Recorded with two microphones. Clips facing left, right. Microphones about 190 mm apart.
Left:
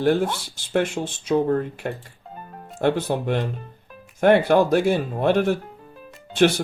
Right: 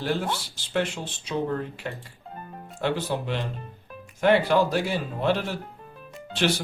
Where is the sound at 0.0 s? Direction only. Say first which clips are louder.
Left 7 dB; 50° left (ahead or behind).